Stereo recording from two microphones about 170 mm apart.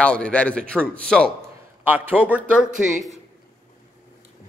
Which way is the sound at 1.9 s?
10° right (ahead or behind).